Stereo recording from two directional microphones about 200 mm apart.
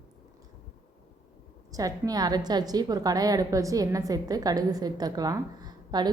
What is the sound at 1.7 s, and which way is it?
A woman's voice, 20° right (ahead or behind).